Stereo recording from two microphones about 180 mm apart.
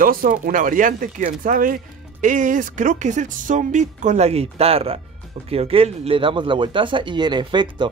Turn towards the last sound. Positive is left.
turn(degrees=-25)  # may be behind; listen again after turning